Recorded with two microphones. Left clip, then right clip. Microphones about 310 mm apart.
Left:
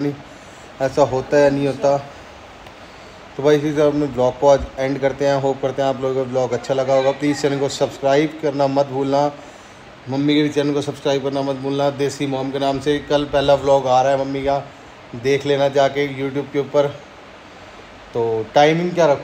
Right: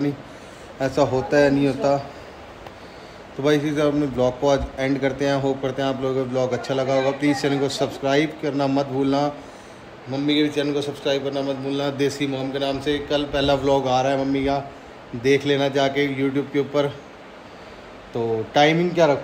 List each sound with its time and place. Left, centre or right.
0.7 s a man's voice: centre
3.4 s a man's voice: centre
10.1 s a man's voice: left
11.8 s a man's voice: centre
13.5 s a man's voice: centre
18.1 s a man's voice: centre